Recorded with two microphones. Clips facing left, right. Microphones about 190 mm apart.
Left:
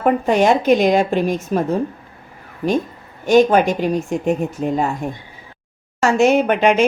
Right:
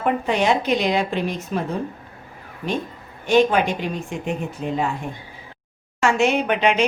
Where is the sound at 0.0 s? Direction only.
45° left (ahead or behind).